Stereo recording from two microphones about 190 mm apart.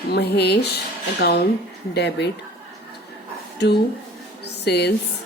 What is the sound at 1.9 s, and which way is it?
Speech, 60° left (ahead or behind).